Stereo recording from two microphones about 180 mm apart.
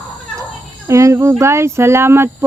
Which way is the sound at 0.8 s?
15° right (ahead or behind).